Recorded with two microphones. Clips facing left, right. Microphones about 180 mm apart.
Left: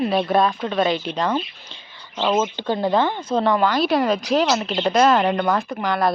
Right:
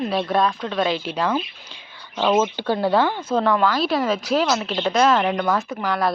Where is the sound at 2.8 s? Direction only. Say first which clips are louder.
Even; 5° right (ahead or behind).